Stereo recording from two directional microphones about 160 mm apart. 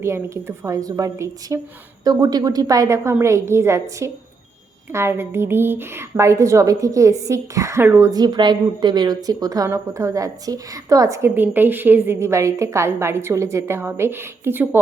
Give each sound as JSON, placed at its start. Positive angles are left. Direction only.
{"t": 0.0, "sound": "a woman's voice", "side_deg": -15}